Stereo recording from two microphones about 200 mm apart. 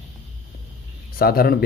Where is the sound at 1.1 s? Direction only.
50° left (ahead or behind).